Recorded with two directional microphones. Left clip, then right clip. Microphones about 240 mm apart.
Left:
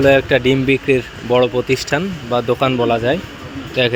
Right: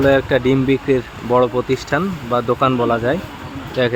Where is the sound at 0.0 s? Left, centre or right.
Centre.